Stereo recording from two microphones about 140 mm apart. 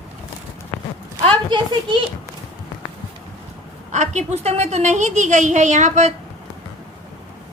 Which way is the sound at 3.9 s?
55° right (ahead or behind).